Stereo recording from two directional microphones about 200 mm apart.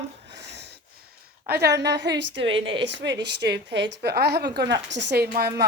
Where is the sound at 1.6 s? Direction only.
55° right (ahead or behind).